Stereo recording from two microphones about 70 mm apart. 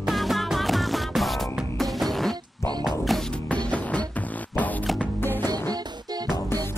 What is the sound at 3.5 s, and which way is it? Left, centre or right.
Music, centre.